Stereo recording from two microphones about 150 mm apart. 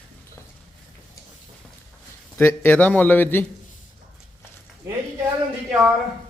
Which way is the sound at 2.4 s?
15° left (ahead or behind).